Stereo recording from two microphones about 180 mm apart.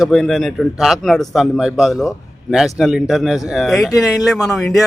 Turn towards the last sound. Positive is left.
turn(degrees=0)  # may be behind; listen again after turning